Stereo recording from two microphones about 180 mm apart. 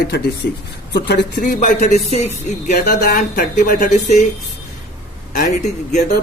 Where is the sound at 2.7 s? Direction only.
55° left (ahead or behind).